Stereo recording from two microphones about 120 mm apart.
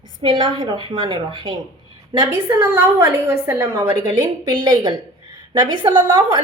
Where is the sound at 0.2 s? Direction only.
40° right (ahead or behind).